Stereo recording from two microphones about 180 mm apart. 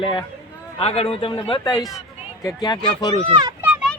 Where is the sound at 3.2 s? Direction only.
25° right (ahead or behind).